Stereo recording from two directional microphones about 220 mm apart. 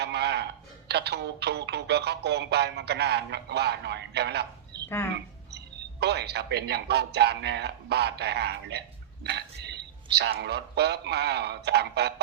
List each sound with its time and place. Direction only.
0.0 s speech: 50° right (ahead or behind)